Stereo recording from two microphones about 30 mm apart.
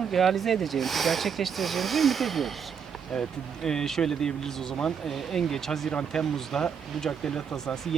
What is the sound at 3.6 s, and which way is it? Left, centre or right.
Speech, centre.